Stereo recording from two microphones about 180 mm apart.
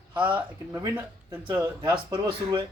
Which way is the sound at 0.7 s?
20° right (ahead or behind).